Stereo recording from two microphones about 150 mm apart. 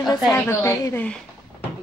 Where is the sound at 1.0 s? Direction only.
10° left (ahead or behind).